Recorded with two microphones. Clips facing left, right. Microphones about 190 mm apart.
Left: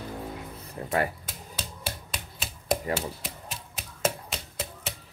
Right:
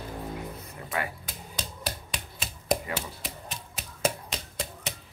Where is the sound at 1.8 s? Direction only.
5° left (ahead or behind).